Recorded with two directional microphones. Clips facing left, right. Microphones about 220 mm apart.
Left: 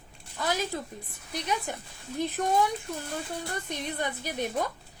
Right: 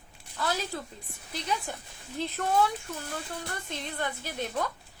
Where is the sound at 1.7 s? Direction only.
20° left (ahead or behind).